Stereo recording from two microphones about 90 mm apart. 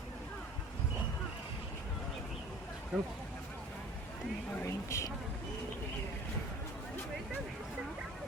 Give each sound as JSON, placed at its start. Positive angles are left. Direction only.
{"t": 2.9, "sound": "speech", "side_deg": -5}
{"t": 4.6, "sound": "speech", "side_deg": 35}